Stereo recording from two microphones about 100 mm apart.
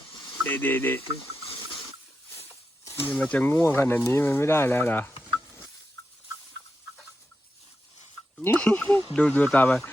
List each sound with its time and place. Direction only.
0.4 s speech: 20° left (ahead or behind)
2.8 s speech: 25° left (ahead or behind)
8.4 s speech: 15° left (ahead or behind)